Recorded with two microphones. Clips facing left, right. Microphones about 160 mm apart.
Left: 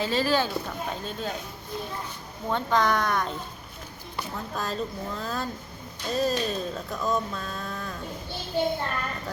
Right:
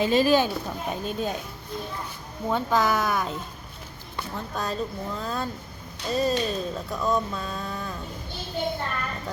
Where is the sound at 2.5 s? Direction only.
5° right (ahead or behind).